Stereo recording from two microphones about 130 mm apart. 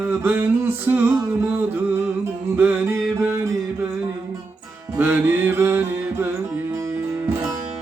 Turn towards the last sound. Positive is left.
turn(degrees=-15)  # may be behind; listen again after turning